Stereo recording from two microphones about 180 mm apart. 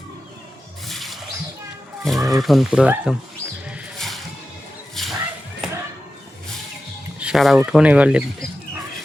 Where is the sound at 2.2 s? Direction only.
Centre (ahead or behind).